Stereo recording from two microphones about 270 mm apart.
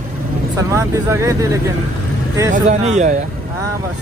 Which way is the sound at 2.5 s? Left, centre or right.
Right.